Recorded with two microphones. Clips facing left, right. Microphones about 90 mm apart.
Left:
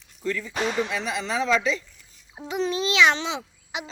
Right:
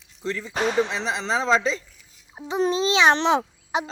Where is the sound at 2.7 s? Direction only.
30° right (ahead or behind).